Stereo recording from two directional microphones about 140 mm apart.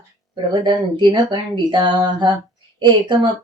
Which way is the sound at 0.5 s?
35° right (ahead or behind).